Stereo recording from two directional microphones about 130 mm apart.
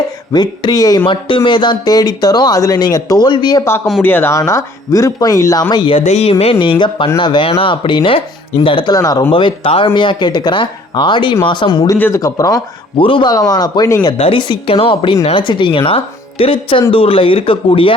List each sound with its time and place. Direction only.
0.3 s speech: 30° left (ahead or behind)
1.0 s speech: 40° left (ahead or behind)
4.0 s speech: 15° left (ahead or behind); by 6.0 s 35° left (ahead or behind)
6.1 s speech: 50° left (ahead or behind)
9.0 s speech: 25° left (ahead or behind)
11.9 s speech: 15° left (ahead or behind)
12.2 s speech: 25° left (ahead or behind)
13.0 s speech: 40° left (ahead or behind)
13.3 s speech: 30° left (ahead or behind)
14.1 s speech: 40° left (ahead or behind)